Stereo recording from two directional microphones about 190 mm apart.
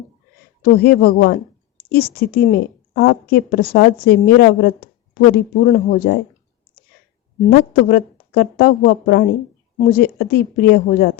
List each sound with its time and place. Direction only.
0.6 s a woman's voice: 55° left (ahead or behind)
7.5 s a woman's voice: 55° left (ahead or behind)